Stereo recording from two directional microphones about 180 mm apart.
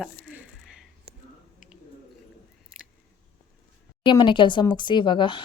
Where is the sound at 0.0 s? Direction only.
5° right (ahead or behind).